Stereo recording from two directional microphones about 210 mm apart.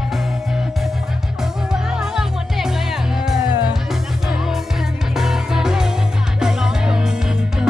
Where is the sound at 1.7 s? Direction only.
5° right (ahead or behind).